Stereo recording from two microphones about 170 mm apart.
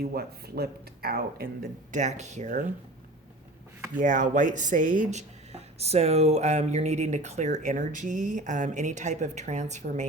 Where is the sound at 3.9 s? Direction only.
50° right (ahead or behind).